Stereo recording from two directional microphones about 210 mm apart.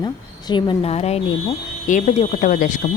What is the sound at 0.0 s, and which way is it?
A woman's voice, 20° left (ahead or behind).